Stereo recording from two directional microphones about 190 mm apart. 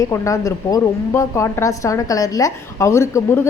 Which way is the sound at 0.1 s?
15° left (ahead or behind).